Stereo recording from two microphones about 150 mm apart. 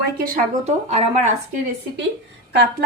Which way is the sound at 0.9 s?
50° right (ahead or behind).